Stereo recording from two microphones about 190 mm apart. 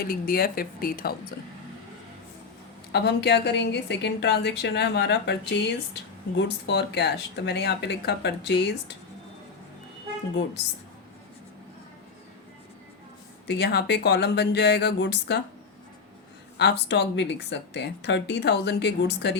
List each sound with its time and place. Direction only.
0.0 s speech: 50° left (ahead or behind)
2.9 s a woman's voice: 60° left (ahead or behind)
13.5 s a woman's voice: 60° left (ahead or behind)
16.6 s a woman's voice: 60° left (ahead or behind)